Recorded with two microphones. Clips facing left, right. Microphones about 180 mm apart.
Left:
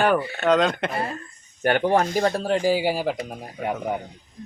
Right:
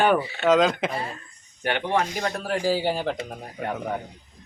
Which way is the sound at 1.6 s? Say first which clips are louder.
Left 5 dB; 45° left (ahead or behind).